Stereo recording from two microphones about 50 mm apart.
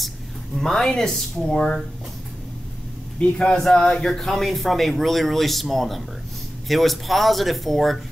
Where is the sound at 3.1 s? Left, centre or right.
Left.